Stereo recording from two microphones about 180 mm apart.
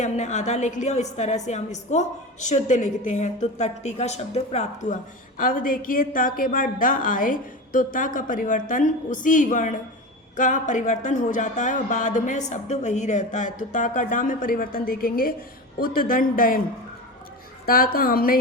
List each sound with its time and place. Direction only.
0.0 s a woman's voice: 40° left (ahead or behind)
17.7 s a woman's voice: 55° left (ahead or behind)